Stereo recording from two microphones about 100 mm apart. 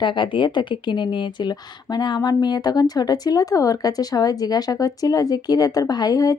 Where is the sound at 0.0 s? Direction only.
55° left (ahead or behind).